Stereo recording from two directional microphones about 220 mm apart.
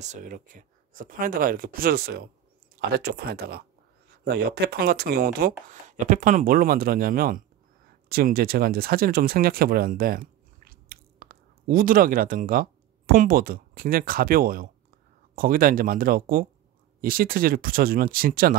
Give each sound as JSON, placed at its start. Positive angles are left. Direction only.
{"t": 0.0, "sound": "speech", "side_deg": -35}